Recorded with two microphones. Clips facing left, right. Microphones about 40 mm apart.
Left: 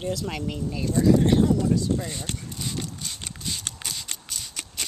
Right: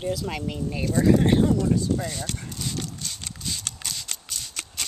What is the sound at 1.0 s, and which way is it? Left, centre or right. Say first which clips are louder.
Speech: even; right.